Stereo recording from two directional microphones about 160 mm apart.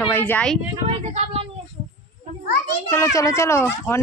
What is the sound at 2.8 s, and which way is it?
A woman's voice, 15° left (ahead or behind).